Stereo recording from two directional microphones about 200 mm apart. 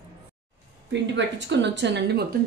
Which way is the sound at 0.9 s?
60° right (ahead or behind).